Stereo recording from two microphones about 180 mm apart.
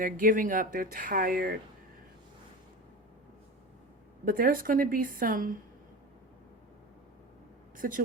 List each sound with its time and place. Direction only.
0.0 s speech: 50° right (ahead or behind)
4.3 s speech: 50° right (ahead or behind)
7.8 s speech: 50° right (ahead or behind)